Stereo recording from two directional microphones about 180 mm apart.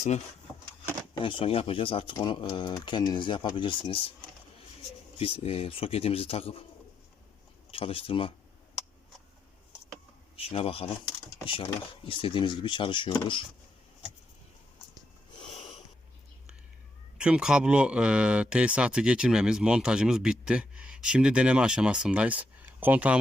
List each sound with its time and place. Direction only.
1.2 s speech: 30° left (ahead or behind)
5.2 s a man's voice: 30° left (ahead or behind)
7.7 s a man's voice: 30° left (ahead or behind)
10.3 s speech: 30° left (ahead or behind)
12.0 s speech: 30° left (ahead or behind)
15.4 s a sound: 30° left (ahead or behind)
17.2 s a man's voice: 5° right (ahead or behind)